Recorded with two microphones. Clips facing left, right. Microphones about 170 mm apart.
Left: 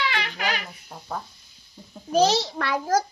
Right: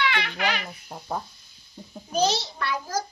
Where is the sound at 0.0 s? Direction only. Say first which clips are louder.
Right 1 dB; 35° left (ahead or behind).